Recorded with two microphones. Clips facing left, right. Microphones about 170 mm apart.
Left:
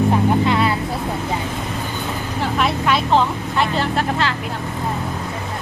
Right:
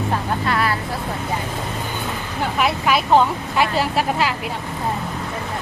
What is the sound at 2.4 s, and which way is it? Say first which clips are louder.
Vehicle: even; 5° right (ahead or behind).